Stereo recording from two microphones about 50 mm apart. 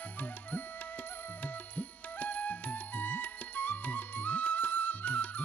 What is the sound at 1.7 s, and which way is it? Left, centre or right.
Music, left.